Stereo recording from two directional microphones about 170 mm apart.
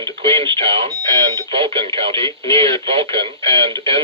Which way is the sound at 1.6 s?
30° right (ahead or behind).